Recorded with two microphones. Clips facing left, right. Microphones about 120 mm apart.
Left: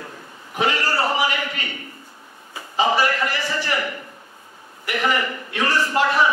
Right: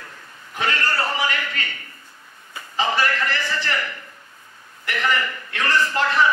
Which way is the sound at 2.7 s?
15° left (ahead or behind).